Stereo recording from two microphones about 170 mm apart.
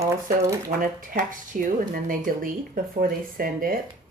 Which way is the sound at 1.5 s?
55° right (ahead or behind).